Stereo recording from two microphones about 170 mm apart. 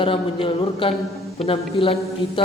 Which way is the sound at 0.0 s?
30° left (ahead or behind).